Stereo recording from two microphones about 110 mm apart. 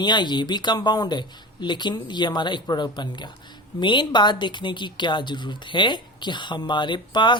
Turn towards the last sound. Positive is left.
turn(degrees=45)  # may be behind; listen again after turning